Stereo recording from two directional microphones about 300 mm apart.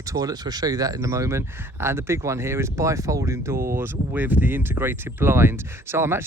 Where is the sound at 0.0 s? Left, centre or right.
Centre.